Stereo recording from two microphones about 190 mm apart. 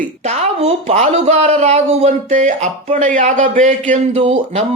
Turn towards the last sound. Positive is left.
turn(degrees=-30)  # may be behind; listen again after turning